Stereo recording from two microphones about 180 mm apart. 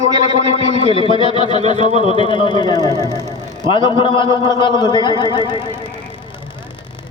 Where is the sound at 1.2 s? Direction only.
30° left (ahead or behind).